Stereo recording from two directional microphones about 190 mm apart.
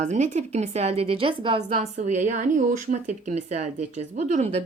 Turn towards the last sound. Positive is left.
turn(degrees=-40)  # may be behind; listen again after turning